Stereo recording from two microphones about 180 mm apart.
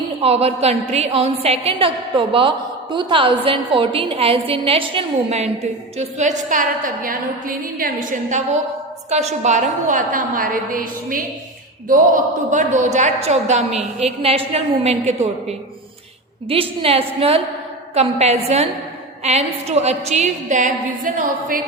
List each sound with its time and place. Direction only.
0.2 s a woman's voice: 35° right (ahead or behind)
16.5 s a woman's voice: 30° right (ahead or behind)